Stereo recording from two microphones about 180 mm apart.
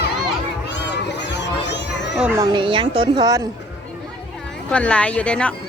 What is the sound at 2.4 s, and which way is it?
A woman's voice, 25° right (ahead or behind).